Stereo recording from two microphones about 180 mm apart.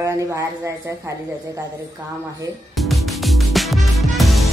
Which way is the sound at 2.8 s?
Centre (ahead or behind).